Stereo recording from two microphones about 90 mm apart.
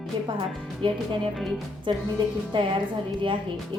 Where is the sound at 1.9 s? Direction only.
60° right (ahead or behind).